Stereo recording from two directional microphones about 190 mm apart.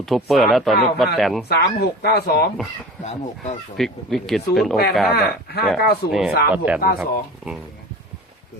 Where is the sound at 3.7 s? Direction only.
Centre (ahead or behind).